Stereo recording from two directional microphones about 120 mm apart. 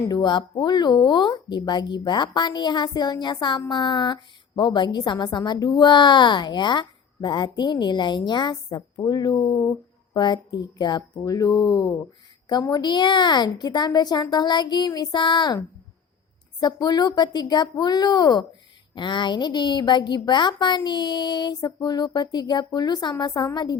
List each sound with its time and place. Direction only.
0.1 s a woman's voice: 40° left (ahead or behind)